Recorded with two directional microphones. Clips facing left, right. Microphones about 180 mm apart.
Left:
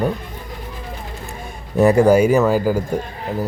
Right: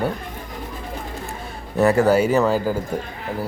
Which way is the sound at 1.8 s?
15° left (ahead or behind).